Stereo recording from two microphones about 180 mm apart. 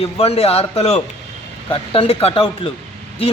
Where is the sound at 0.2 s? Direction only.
35° left (ahead or behind).